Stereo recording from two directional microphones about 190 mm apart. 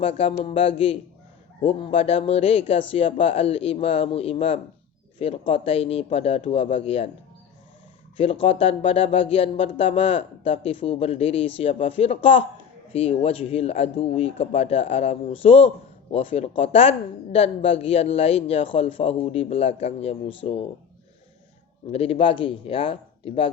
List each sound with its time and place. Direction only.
0.0 s speech: 30° left (ahead or behind)
8.1 s speech: 30° left (ahead or behind)
21.9 s speech: 30° left (ahead or behind)